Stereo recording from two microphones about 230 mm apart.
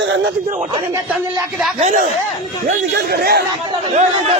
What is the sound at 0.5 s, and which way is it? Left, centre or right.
Speech, right.